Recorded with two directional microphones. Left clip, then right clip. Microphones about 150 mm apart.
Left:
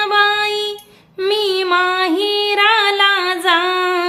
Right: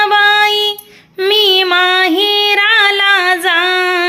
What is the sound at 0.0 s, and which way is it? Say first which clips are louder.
Child singing: right 5 dB; 10° right (ahead or behind).